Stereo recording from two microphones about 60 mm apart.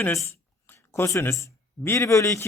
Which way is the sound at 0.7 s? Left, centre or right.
Left.